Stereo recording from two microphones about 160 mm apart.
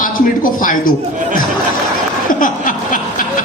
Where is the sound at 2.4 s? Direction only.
55° left (ahead or behind).